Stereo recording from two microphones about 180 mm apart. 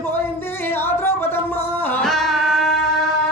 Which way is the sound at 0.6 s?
10° left (ahead or behind).